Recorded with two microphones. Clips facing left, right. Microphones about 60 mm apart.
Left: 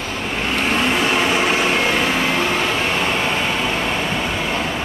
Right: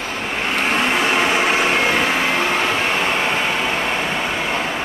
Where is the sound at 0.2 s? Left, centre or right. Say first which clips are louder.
Even; right.